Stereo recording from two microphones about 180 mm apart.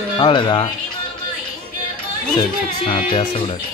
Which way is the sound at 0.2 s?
25° left (ahead or behind).